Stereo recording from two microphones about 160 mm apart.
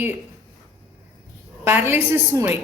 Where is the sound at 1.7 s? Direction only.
15° right (ahead or behind).